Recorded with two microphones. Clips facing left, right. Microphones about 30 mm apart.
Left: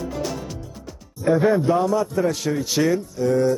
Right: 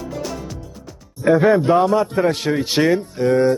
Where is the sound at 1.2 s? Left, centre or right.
Right.